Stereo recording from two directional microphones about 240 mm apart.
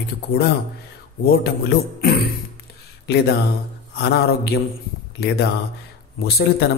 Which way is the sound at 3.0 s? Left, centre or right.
Left.